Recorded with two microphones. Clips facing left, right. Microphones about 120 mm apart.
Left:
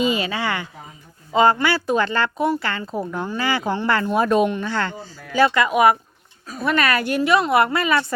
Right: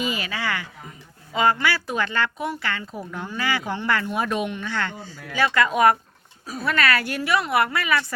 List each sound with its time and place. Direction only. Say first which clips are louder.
0.0 s a sound: left 6 dB; 25° left (ahead or behind)
1.3 s speech: left 5 dB; 30° left (ahead or behind)
5.5 s speech: right 1 dB; 15° left (ahead or behind)
6.4 s speech: left 2 dB; 5° right (ahead or behind)
6.7 s a woman's voice: left 3 dB; 20° left (ahead or behind)